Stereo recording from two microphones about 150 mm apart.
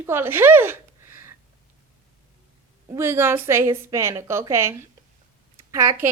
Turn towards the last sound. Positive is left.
turn(degrees=-15)  # may be behind; listen again after turning